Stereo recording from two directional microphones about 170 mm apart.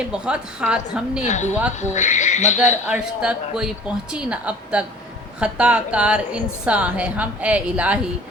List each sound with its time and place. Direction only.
0.1 s a woman's voice: 5° right (ahead or behind)
1.2 s speech: 45° left (ahead or behind)
2.8 s a woman's voice: 5° right (ahead or behind)